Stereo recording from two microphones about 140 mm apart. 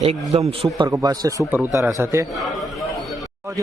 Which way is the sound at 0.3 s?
45° right (ahead or behind).